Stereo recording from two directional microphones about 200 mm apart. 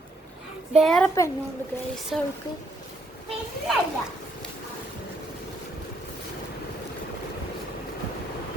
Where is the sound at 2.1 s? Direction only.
Centre (ahead or behind).